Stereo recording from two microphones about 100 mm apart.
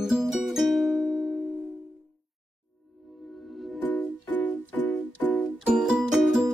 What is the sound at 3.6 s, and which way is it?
Music, centre (ahead or behind).